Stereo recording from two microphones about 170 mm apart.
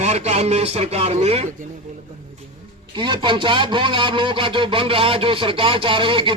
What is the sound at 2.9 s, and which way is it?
Speech, 30° right (ahead or behind).